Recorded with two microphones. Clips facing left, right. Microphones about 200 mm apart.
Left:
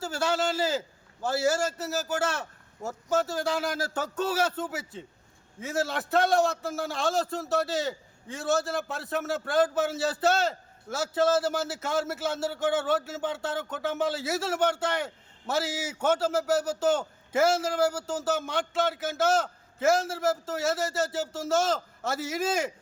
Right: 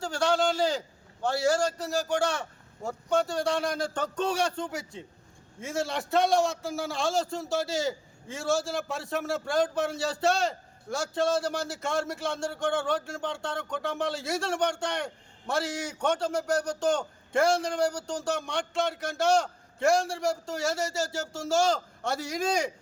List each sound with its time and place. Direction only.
0.0 s a man's voice: 5° left (ahead or behind)